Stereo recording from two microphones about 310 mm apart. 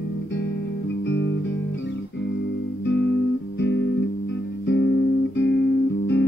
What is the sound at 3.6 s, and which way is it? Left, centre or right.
Music, left.